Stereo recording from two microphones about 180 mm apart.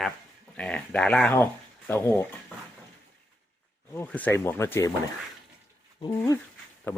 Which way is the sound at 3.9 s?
10° left (ahead or behind).